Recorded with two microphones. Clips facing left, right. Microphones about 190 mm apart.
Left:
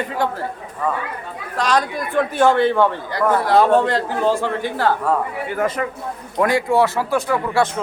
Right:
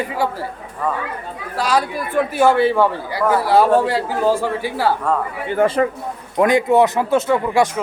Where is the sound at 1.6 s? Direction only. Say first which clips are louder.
Even; 5° right (ahead or behind).